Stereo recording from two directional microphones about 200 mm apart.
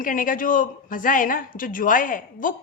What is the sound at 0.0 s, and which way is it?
A man's voice, 45° left (ahead or behind).